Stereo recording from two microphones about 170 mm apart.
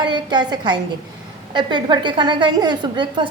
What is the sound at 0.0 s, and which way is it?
A woman's voice, 25° right (ahead or behind).